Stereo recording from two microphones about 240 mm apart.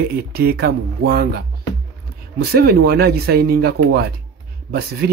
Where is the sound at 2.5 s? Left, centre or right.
Right.